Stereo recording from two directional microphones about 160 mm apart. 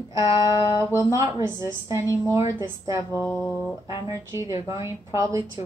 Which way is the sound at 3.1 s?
15° left (ahead or behind).